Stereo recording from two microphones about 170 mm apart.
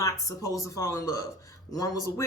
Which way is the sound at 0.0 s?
20° left (ahead or behind).